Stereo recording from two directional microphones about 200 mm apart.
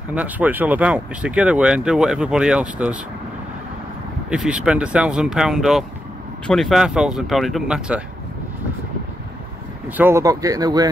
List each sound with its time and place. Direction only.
0.1 s speech: 5° right (ahead or behind)
4.3 s speech: 5° right (ahead or behind)
9.8 s speech: 10° right (ahead or behind)